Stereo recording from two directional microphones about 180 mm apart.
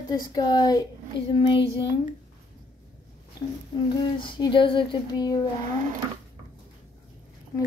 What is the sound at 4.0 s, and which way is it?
Speech, 25° left (ahead or behind).